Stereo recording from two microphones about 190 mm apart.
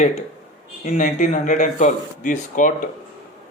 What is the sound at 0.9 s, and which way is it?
A man's voice, 40° left (ahead or behind).